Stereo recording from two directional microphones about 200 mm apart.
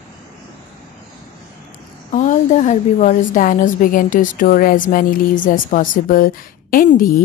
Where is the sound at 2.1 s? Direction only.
40° left (ahead or behind).